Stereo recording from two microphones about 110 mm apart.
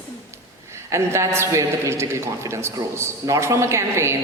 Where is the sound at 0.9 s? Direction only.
25° right (ahead or behind).